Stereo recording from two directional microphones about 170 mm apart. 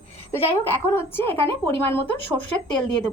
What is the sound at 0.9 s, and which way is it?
Speech, 15° left (ahead or behind).